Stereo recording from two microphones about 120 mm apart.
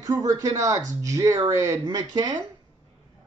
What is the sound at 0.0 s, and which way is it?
Speech, 30° right (ahead or behind).